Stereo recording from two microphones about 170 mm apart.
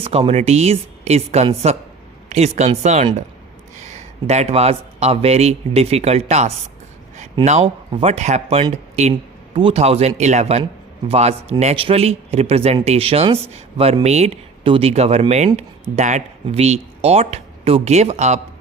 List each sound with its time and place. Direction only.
0.0 s speech: 35° right (ahead or behind)